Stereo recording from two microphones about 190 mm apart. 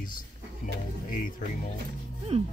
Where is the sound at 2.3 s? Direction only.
35° right (ahead or behind).